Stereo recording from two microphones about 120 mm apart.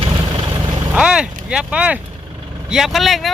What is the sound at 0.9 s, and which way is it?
Speech, 5° right (ahead or behind).